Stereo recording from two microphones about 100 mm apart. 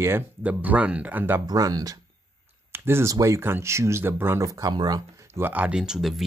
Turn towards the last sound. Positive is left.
turn(degrees=-5)  # may be behind; listen again after turning